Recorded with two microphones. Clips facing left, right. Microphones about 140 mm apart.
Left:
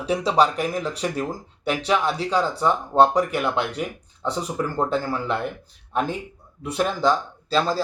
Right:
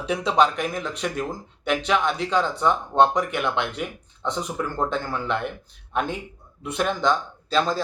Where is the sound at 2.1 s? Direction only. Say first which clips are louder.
Even; 35° left (ahead or behind).